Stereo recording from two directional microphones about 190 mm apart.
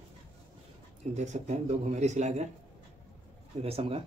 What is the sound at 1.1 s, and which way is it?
Speech, 35° right (ahead or behind).